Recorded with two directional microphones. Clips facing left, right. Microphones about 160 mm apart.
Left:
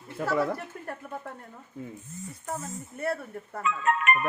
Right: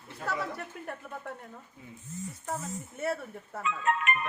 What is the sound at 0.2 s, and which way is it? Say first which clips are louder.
Speech: left 6 dB; 60° left (ahead or behind).